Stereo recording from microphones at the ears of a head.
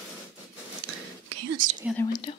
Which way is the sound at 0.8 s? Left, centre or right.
Right.